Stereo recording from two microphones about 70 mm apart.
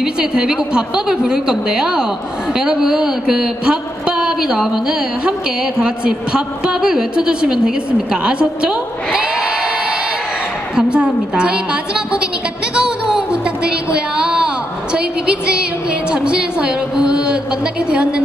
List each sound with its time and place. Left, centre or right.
0.0 s speech: centre
12.7 s a sound: centre
17.8 s speech: centre